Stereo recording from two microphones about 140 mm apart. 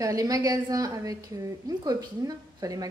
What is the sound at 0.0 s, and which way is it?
A woman's voice, 25° right (ahead or behind).